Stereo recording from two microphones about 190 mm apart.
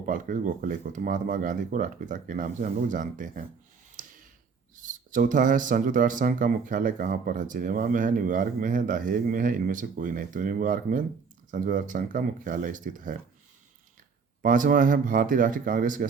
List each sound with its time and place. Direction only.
0.0 s speech: 45° right (ahead or behind)
3.9 s a sound: 45° right (ahead or behind)
4.8 s speech: 45° right (ahead or behind)
14.4 s speech: 45° right (ahead or behind)